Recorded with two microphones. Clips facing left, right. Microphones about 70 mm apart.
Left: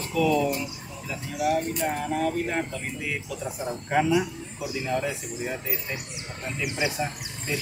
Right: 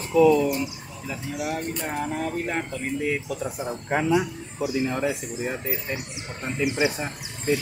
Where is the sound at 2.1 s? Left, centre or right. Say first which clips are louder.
Left 1 dB; right.